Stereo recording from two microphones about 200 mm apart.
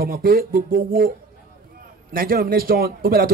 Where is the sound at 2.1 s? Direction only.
45° right (ahead or behind).